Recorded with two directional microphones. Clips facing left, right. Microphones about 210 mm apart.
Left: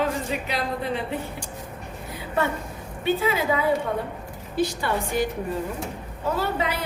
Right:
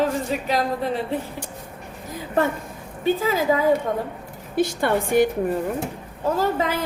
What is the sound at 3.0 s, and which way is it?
Speech, 40° right (ahead or behind).